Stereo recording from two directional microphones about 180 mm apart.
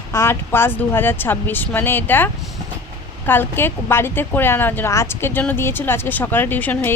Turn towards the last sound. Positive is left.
turn(degrees=10)  # may be behind; listen again after turning